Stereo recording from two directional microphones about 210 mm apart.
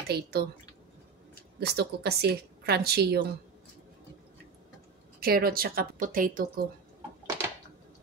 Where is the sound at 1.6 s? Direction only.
50° right (ahead or behind).